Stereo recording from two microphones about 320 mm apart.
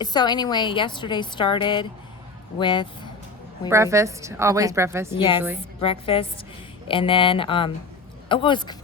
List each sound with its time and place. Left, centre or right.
0.0 s a woman's voice: centre
3.7 s a woman's voice: centre
5.1 s a woman's voice: centre